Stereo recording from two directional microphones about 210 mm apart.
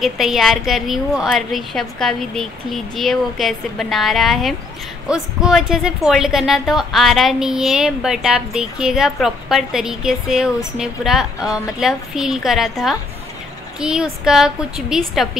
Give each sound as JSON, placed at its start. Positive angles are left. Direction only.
{"t": 0.0, "sound": "a woman's voice", "side_deg": 0}